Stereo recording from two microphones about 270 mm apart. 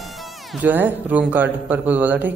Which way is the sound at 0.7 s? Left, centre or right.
Centre.